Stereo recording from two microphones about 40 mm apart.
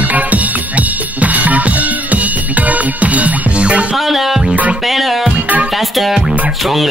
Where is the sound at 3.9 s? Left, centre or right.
Centre.